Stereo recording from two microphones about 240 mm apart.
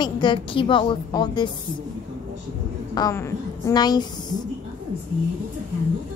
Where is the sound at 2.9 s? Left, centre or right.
Centre.